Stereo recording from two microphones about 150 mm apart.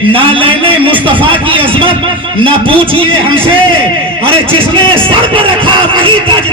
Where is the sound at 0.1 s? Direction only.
35° right (ahead or behind).